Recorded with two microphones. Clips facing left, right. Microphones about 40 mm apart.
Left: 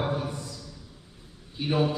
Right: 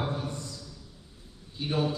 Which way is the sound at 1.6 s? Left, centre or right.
Left.